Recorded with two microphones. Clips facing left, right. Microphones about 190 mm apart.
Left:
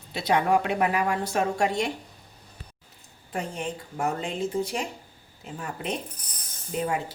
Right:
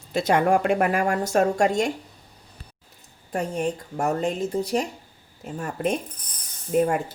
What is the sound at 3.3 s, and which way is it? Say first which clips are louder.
A woman's voice: right 6 dB; 40° right (ahead or behind).